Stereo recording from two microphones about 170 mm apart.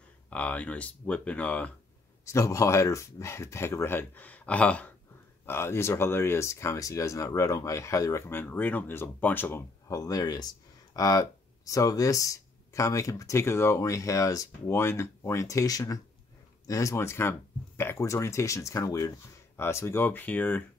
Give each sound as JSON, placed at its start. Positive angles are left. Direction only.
{"t": 0.3, "sound": "speech", "side_deg": 10}